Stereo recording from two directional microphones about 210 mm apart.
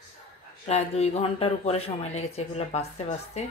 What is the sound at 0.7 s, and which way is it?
Speech, 30° left (ahead or behind).